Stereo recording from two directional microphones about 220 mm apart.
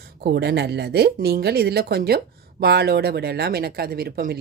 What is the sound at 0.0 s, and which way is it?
Speech, 45° right (ahead or behind).